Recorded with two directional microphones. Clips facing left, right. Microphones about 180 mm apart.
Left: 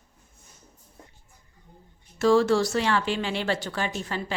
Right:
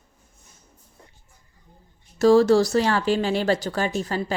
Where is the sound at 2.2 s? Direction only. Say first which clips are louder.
Right 5 dB; 40° right (ahead or behind).